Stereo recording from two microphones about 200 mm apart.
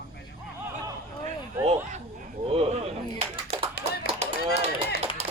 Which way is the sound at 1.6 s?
35° right (ahead or behind).